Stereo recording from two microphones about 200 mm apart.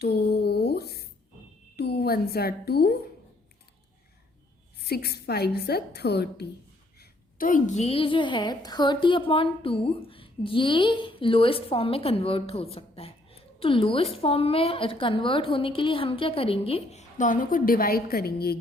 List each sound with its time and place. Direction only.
0.0 s a sound: 55° left (ahead or behind)
1.7 s a woman's voice: 55° left (ahead or behind)
4.9 s a woman's voice: 55° left (ahead or behind)
7.0 s a woman's voice: 45° left (ahead or behind)